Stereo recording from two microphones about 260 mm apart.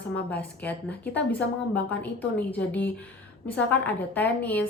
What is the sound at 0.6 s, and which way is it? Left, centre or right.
A woman's voice, centre.